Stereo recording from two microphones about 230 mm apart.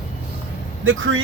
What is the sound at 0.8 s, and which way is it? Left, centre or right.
Speech, right.